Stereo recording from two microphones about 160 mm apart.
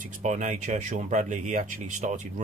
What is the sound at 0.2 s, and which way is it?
Speech, 50° right (ahead or behind).